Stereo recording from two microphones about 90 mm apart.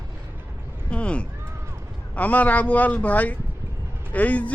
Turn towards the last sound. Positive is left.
turn(degrees=15)  # may be behind; listen again after turning